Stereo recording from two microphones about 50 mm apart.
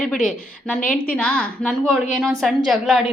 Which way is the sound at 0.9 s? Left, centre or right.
Left.